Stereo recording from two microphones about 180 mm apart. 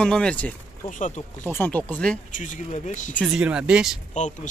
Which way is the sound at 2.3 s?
45° left (ahead or behind).